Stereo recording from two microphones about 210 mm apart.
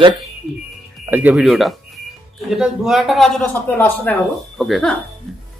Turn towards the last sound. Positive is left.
turn(degrees=0)  # may be behind; listen again after turning